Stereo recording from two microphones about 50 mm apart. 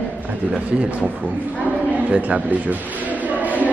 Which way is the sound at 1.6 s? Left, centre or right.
Right.